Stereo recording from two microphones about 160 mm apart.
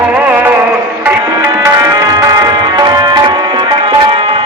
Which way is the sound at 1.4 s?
20° right (ahead or behind).